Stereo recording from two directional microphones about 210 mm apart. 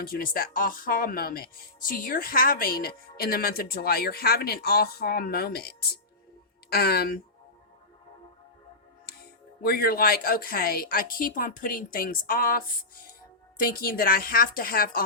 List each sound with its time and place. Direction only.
0.0 s a woman's voice: 45° left (ahead or behind)
9.0 s a woman's voice: 50° left (ahead or behind)